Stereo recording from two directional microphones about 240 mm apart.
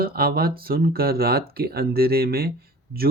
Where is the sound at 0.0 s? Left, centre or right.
Right.